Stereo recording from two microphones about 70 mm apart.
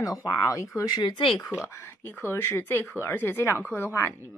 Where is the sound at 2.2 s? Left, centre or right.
Left.